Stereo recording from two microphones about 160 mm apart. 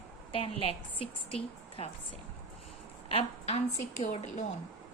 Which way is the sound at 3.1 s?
40° left (ahead or behind).